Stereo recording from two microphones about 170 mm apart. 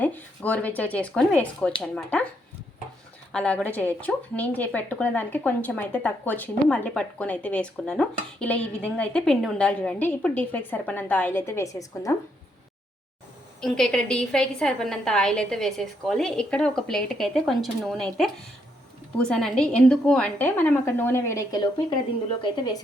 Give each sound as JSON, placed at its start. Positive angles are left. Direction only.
{"t": 0.0, "sound": "a woman's voice", "side_deg": 10}
{"t": 3.3, "sound": "a woman's voice", "side_deg": 5}
{"t": 13.6, "sound": "a woman's voice", "side_deg": 5}